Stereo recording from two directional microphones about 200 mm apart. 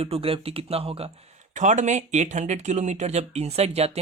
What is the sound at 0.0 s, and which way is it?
Speech, 30° right (ahead or behind).